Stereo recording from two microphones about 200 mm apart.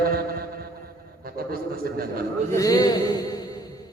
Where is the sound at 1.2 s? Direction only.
50° right (ahead or behind).